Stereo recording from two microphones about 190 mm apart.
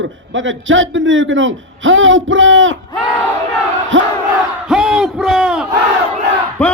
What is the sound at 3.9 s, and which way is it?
Crowd, 85° right.